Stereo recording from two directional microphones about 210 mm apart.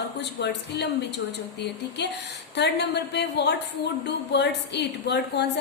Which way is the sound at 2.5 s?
55° left (ahead or behind).